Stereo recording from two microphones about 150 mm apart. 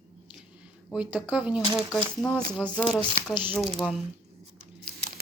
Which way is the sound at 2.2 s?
5° left (ahead or behind).